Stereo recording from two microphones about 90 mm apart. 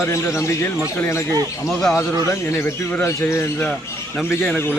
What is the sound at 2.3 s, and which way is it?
Speech, 30° left (ahead or behind).